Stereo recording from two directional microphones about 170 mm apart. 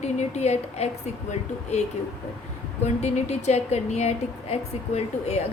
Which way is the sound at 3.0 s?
40° left (ahead or behind).